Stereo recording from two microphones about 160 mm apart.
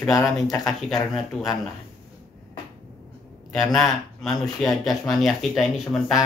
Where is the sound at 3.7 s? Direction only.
Centre (ahead or behind).